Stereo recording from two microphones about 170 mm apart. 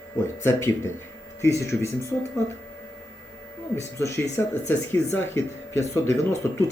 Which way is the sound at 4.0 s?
15° left (ahead or behind).